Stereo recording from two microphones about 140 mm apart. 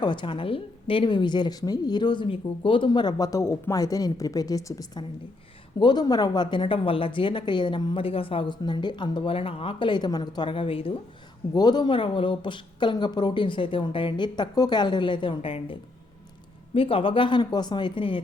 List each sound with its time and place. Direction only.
0.0 s a woman's voice: 35° left (ahead or behind)
11.5 s a woman's voice: 30° left (ahead or behind)